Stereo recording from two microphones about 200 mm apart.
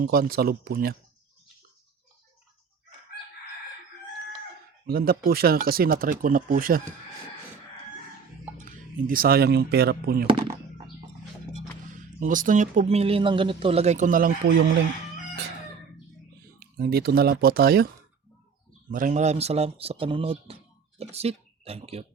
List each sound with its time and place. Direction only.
0.0 s speech: 45° right (ahead or behind)
4.9 s speech: 50° right (ahead or behind)
9.0 s speech: 45° right (ahead or behind)
10.2 s speech: 25° right (ahead or behind)
12.2 s speech: 40° right (ahead or behind)
16.6 s speech: 50° right (ahead or behind)
18.9 s speech: 40° right (ahead or behind)